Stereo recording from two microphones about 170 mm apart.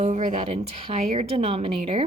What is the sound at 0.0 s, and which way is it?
A woman's voice, 45° right (ahead or behind).